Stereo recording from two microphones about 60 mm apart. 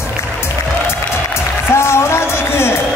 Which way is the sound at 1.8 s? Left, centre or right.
Left.